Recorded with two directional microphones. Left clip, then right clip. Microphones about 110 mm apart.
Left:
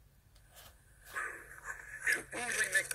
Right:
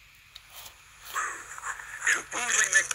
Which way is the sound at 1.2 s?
30° left (ahead or behind).